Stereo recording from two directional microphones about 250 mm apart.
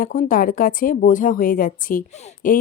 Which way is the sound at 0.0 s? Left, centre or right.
Left.